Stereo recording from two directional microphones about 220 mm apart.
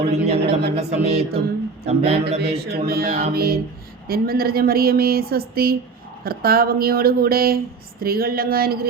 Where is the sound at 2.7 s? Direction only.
45° right (ahead or behind).